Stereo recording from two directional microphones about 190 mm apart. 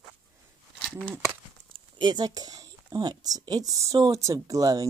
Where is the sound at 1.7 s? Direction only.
25° right (ahead or behind).